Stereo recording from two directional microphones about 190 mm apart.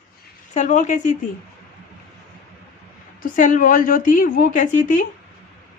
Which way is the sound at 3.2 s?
45° left (ahead or behind).